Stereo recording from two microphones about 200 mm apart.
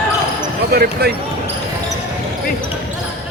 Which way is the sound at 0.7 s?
50° right (ahead or behind).